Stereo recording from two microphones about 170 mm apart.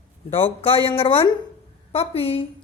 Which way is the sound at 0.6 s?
35° left (ahead or behind).